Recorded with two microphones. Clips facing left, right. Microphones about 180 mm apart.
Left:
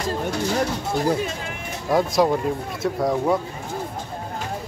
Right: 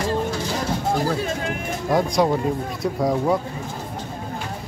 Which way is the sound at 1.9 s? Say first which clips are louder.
Left 1 dB; centre (ahead or behind).